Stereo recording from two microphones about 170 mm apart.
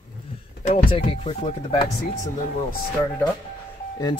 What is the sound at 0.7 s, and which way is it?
Speech, 35° left (ahead or behind).